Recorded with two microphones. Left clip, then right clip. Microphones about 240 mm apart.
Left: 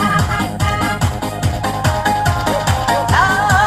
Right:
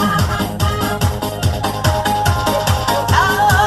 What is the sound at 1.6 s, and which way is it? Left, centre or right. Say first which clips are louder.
Music: left 1 dB; right.